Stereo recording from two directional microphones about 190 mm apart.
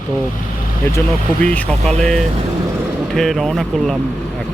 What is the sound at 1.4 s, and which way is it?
Speech, 5° left (ahead or behind).